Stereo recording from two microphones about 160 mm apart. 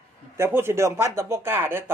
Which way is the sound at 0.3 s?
15° right (ahead or behind).